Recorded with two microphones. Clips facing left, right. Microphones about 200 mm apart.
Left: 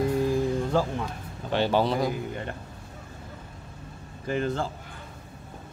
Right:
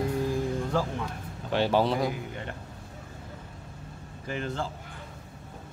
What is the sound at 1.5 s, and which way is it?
Speech, centre (ahead or behind).